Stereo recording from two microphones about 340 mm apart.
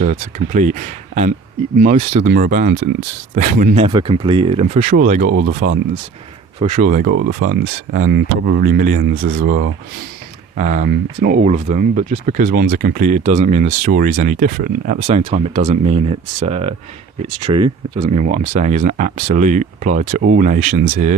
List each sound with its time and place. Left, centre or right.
0.0 s speech: right